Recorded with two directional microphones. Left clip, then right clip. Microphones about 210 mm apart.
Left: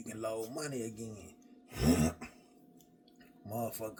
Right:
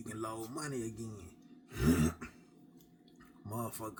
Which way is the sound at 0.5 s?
5° left (ahead or behind).